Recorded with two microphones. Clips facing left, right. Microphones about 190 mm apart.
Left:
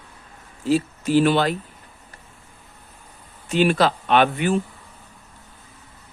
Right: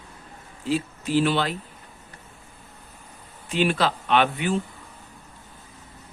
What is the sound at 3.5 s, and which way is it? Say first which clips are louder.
Speech: left 4 dB; 45° left (ahead or behind).